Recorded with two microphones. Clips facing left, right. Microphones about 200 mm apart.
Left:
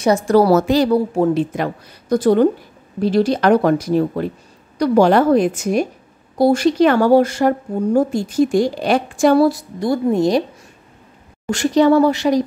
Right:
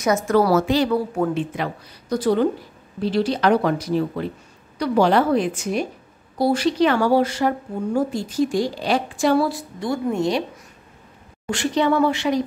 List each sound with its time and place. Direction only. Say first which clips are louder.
0.0 s speech: left 5 dB; 30° left (ahead or behind)
1.1 s speech: left 6 dB; 30° left (ahead or behind)
1.5 s speech: left 5 dB; 45° left (ahead or behind)
11.5 s speech: left 7 dB; 40° left (ahead or behind)